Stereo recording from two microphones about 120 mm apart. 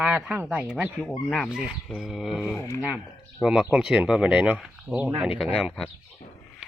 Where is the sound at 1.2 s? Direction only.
5° left (ahead or behind).